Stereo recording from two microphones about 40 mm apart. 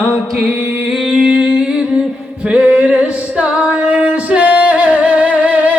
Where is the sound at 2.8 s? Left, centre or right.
Right.